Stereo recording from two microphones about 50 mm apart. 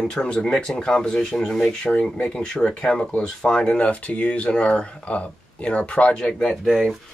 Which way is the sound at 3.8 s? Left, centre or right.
Left.